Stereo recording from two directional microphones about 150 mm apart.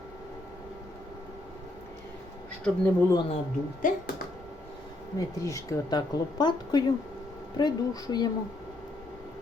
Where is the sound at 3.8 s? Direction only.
65° left (ahead or behind).